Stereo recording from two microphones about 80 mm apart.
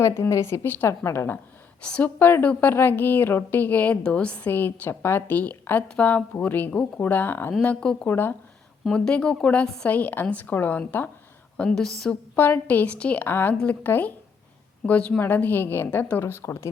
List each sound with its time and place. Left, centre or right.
0.0 s a woman's voice: left
1.8 s speech: centre
2.1 s a woman's voice: left
7.6 s speech: centre
8.0 s a woman's voice: left
8.9 s speech: centre
9.9 s a woman's voice: left
11.5 s speech: centre
12.4 s a woman's voice: left
16.3 s a woman's voice: left